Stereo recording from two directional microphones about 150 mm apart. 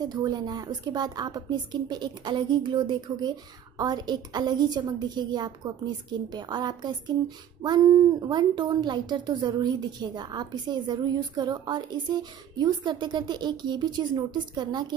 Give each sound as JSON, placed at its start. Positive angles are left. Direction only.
{"t": 0.0, "sound": "a woman's voice", "side_deg": -25}